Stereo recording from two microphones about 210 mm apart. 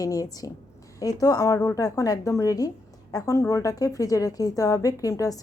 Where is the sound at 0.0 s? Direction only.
15° left (ahead or behind).